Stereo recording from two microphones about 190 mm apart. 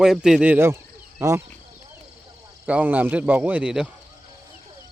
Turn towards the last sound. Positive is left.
turn(degrees=-5)  # may be behind; listen again after turning